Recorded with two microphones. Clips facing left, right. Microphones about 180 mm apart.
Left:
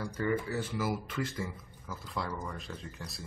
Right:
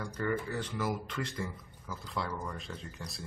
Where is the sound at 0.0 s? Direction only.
5° left (ahead or behind).